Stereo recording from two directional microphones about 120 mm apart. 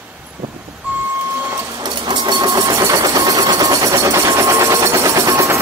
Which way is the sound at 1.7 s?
40° right (ahead or behind).